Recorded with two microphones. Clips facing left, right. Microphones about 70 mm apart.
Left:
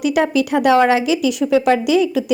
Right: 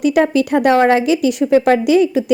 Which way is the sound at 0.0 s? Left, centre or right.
Right.